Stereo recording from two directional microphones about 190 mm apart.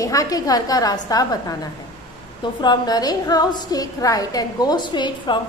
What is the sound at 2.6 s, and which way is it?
A woman's voice, 20° left (ahead or behind).